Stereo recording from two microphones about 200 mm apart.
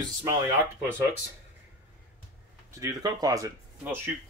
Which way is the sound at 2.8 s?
20° right (ahead or behind).